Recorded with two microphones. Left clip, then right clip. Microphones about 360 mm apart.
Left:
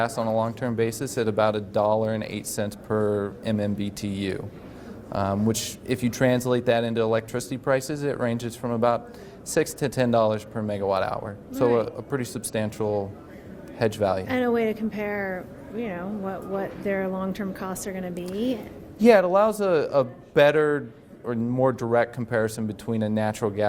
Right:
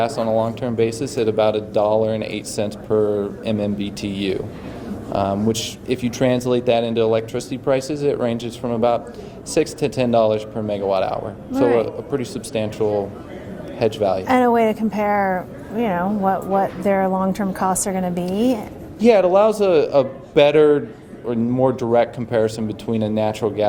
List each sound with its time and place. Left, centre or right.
0.0 s speech: left
14.3 s speech: right
18.9 s speech: left